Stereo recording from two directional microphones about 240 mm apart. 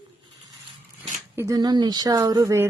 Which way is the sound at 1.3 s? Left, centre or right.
Centre.